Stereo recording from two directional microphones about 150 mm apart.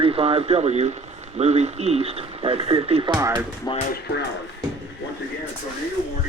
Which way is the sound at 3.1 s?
20° right (ahead or behind).